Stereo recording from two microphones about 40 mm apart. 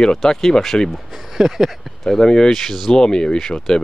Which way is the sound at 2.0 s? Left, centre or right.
Centre.